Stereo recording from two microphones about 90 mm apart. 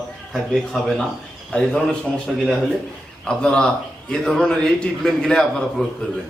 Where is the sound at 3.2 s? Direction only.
10° left (ahead or behind).